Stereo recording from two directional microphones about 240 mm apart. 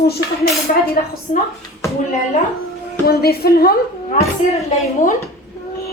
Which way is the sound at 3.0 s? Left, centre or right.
Left.